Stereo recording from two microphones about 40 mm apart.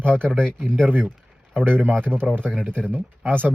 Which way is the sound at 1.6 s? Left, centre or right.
Right.